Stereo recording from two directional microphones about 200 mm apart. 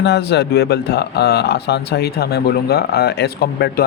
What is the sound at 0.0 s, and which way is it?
Speech, 55° left (ahead or behind).